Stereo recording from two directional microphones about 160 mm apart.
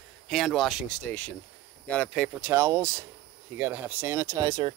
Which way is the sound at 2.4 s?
15° right (ahead or behind).